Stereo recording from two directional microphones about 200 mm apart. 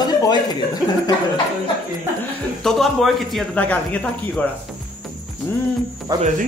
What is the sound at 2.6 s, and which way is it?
Speech, centre (ahead or behind).